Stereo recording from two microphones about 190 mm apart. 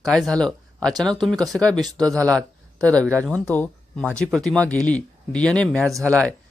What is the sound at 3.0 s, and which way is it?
Speech, 15° right (ahead or behind).